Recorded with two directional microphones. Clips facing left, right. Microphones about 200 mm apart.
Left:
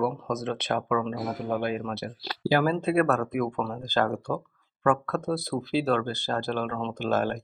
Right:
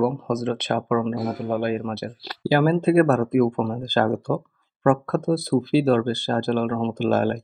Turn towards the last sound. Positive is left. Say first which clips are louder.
# right 6 dB
turn(degrees=-35)  # may be behind; listen again after turning